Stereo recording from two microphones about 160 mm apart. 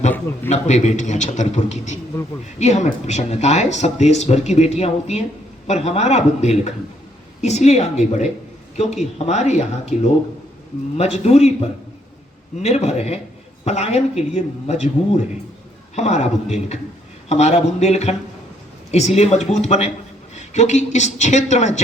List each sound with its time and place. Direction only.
0.4 s a man's voice: 45° left (ahead or behind)